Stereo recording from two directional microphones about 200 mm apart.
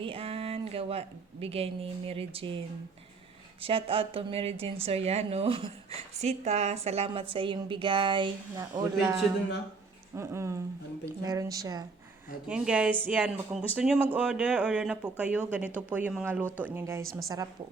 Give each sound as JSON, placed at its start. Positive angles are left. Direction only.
{"t": 0.0, "sound": "speech", "side_deg": -25}
{"t": 3.6, "sound": "a woman's voice", "side_deg": -25}
{"t": 10.2, "sound": "speech", "side_deg": -15}
{"t": 12.5, "sound": "speech", "side_deg": -5}